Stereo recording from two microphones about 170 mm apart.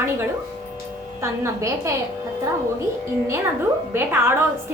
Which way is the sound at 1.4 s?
15° right (ahead or behind).